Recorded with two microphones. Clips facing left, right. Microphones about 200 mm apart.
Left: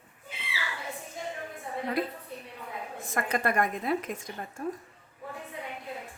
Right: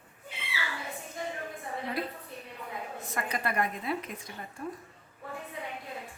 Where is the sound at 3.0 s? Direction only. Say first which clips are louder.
Left 5 dB; 50° left (ahead or behind).